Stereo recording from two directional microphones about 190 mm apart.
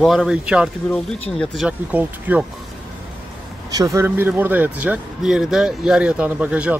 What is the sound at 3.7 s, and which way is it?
Speech, 15° right (ahead or behind).